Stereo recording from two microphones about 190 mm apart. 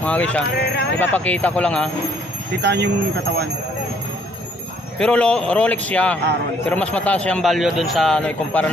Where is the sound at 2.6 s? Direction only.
60° right (ahead or behind).